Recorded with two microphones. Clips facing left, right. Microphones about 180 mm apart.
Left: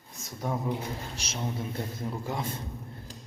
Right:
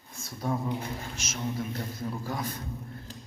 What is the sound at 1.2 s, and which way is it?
A man's voice, 30° left (ahead or behind).